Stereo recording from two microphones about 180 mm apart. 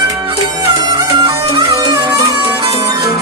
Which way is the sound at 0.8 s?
25° right (ahead or behind).